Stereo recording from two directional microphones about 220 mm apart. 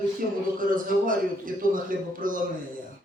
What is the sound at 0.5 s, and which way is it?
A man's voice, 40° right (ahead or behind).